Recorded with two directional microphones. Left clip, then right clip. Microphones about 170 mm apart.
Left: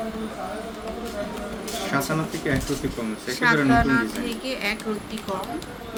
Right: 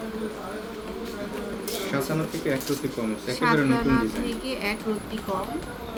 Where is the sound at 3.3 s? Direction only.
30° left (ahead or behind).